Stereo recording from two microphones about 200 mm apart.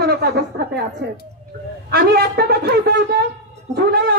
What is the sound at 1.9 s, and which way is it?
A man's voice, 50° right (ahead or behind).